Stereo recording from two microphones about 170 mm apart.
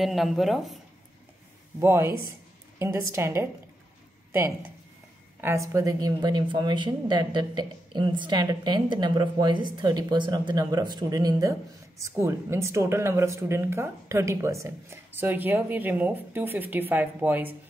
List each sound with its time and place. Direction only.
0.0 s speech: centre (ahead or behind)
1.8 s speech: 15° right (ahead or behind)
5.4 s a woman's voice: 15° right (ahead or behind)